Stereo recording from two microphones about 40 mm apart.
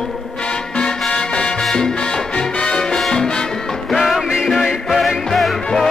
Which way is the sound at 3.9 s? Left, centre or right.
Centre.